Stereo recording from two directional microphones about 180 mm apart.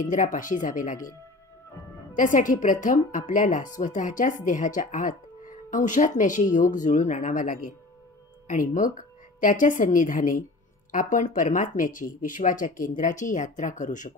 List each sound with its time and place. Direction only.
0.0 s speech: 45° left (ahead or behind)
2.1 s a woman's voice: 45° left (ahead or behind)